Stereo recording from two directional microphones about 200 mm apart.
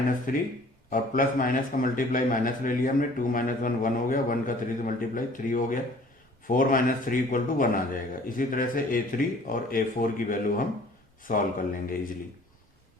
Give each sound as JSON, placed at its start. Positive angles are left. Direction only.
{"t": 0.3, "sound": "a man's voice", "side_deg": 45}